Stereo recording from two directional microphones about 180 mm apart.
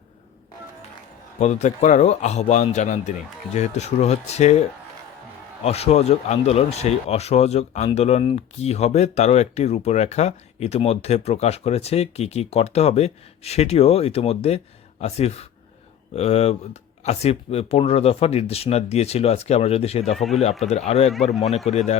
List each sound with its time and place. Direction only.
1.4 s speech: 40° left (ahead or behind)
5.6 s speech: 35° left (ahead or behind)
20.1 s speech: centre (ahead or behind)
20.6 s speech: 35° left (ahead or behind)